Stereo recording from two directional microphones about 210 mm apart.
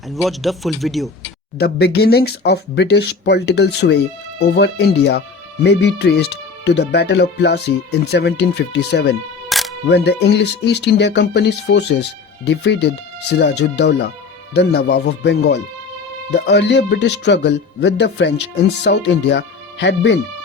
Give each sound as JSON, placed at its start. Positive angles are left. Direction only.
{"t": 0.1, "sound": "a man's voice", "side_deg": 0}
{"t": 1.5, "sound": "speech", "side_deg": 50}
{"t": 9.5, "sound": "camera", "side_deg": 0}
{"t": 9.9, "sound": "speech", "side_deg": 50}